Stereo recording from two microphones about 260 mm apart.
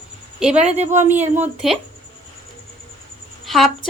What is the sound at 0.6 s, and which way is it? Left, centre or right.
Speech, right.